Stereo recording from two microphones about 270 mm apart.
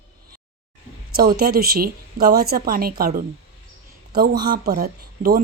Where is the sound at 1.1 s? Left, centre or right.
Right.